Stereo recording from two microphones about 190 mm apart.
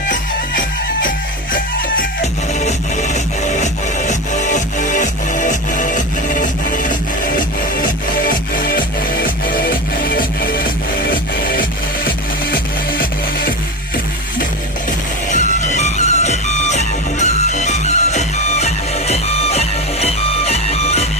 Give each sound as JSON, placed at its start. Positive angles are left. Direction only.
{"t": 2.5, "sound": "music", "side_deg": 40}
{"t": 15.3, "sound": "music", "side_deg": 40}